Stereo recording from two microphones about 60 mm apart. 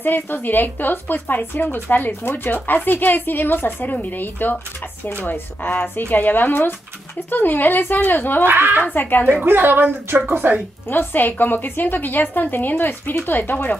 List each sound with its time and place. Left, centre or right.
0.0 s speech: left
8.5 s a woman's voice: right
8.8 s speech: left
9.4 s a woman's voice: right
10.9 s speech: left